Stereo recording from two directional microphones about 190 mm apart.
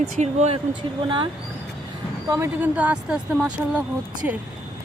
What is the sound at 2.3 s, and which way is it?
Speech, 10° right (ahead or behind).